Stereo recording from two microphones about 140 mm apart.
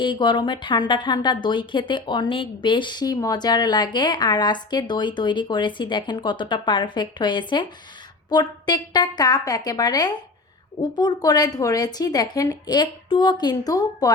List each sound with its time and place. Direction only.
0.0 s a woman's voice: 35° left (ahead or behind)